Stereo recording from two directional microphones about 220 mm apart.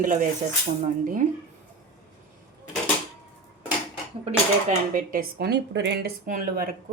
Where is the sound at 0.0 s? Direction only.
35° right (ahead or behind).